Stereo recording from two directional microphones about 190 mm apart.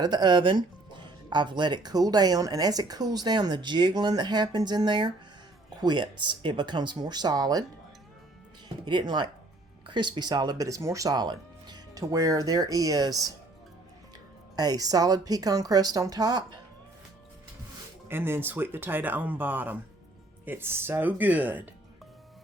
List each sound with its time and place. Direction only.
0.0 s speech: 20° right (ahead or behind)
8.9 s speech: 25° right (ahead or behind)
14.5 s speech: 20° right (ahead or behind)
18.1 s speech: 10° right (ahead or behind)